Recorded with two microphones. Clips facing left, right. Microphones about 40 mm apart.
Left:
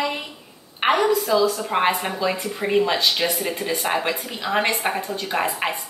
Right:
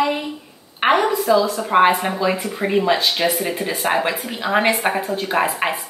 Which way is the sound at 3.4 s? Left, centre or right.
Right.